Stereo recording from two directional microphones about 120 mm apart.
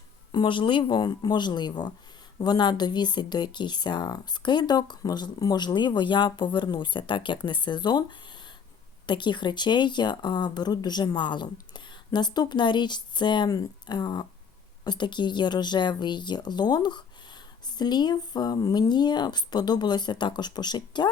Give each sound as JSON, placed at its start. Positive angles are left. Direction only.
{"t": 0.3, "sound": "speech", "side_deg": 40}
{"t": 9.0, "sound": "speech", "side_deg": 40}